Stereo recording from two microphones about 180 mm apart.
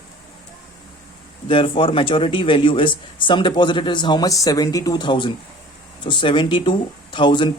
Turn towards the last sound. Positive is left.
turn(degrees=25)  # may be behind; listen again after turning